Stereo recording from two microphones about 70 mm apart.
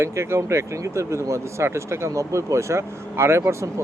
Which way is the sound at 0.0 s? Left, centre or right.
Right.